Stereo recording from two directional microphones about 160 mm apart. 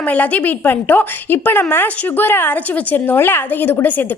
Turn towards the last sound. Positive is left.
turn(degrees=10)  # may be behind; listen again after turning